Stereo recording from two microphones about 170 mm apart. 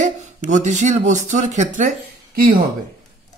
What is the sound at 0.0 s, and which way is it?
Speech, 45° right (ahead or behind).